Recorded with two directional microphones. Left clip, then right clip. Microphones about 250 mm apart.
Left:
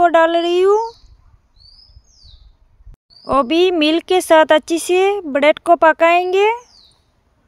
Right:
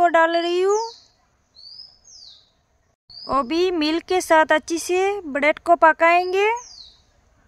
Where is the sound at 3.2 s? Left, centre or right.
Centre.